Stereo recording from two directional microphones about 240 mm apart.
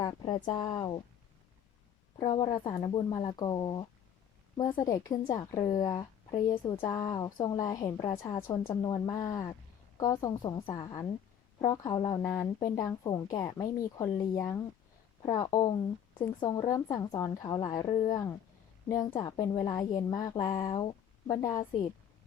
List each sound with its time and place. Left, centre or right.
0.0 s speech: centre
2.3 s speech: centre